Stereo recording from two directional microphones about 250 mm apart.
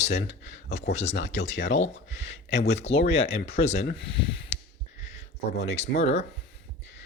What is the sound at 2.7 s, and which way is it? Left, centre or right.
Speech, left.